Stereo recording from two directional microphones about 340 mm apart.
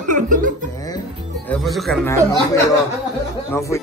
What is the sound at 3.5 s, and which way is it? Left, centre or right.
Speech, centre.